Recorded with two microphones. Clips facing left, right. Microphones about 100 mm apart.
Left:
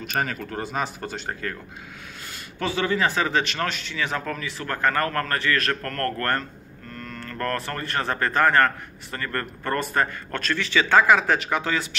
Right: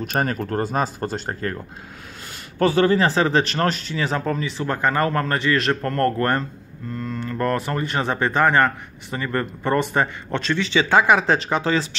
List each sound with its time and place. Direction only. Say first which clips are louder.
0.0 s speech: right 4 dB; 45° right (ahead or behind)
2.6 s speech: right 7 dB; 40° right (ahead or behind)
4.2 s a man's voice: right 6 dB; 25° right (ahead or behind)